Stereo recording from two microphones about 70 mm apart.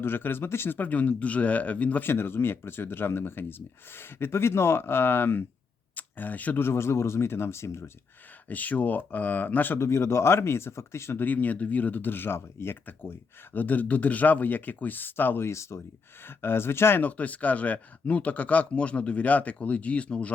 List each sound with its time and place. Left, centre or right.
0.0 s speech: left
2.0 s speech: left
8.4 s speech: left
9.8 s speech: left
11.2 s speech: left